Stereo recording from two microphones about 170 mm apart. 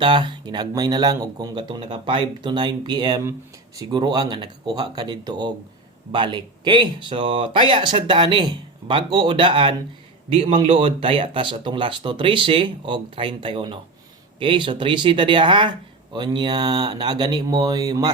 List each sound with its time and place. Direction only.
0.0 s speech: 30° right (ahead or behind)